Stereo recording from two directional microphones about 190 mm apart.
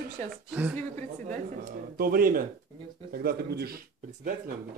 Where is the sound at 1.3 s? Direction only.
45° right (ahead or behind).